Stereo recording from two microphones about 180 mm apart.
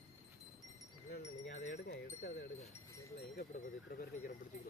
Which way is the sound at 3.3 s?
55° left (ahead or behind).